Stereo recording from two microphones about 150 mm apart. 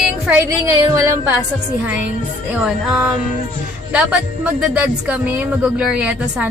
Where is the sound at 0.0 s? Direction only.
10° right (ahead or behind).